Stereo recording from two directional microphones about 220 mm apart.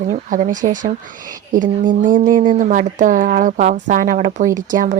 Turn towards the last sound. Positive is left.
turn(degrees=-35)  # may be behind; listen again after turning